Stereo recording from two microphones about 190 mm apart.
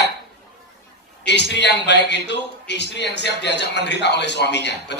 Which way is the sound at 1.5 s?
65° left (ahead or behind).